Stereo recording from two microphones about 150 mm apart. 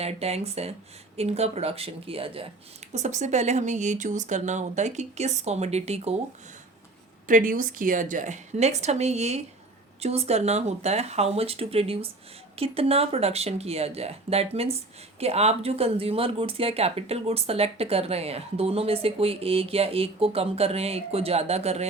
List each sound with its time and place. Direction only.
0.0 s speech: 45° right (ahead or behind)
2.9 s speech: 50° right (ahead or behind)
7.3 s speech: 65° right (ahead or behind); by 21.8 s 45° right (ahead or behind)